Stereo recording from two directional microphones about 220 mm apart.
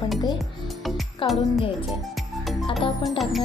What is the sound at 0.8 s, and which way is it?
Music, centre (ahead or behind).